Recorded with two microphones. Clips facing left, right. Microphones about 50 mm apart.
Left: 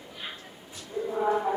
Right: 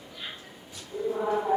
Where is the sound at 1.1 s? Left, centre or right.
Left.